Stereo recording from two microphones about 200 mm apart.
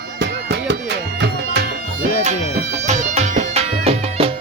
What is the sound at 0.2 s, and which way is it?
Music, 60° right (ahead or behind).